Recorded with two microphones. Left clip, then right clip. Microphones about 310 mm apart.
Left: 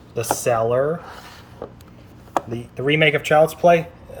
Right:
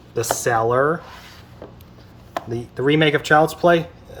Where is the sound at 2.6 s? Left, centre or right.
Right.